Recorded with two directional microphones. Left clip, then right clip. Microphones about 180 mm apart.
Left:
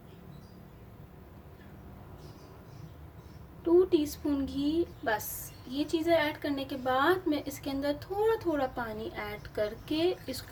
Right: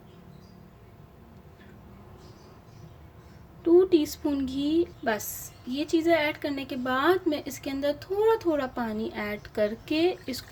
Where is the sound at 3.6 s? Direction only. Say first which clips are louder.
Right 4 dB; 35° right (ahead or behind).